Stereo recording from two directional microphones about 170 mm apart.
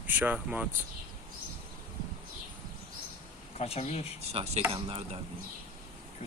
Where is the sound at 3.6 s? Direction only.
40° left (ahead or behind).